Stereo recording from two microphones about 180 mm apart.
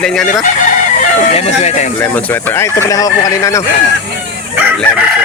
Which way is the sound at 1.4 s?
35° left (ahead or behind).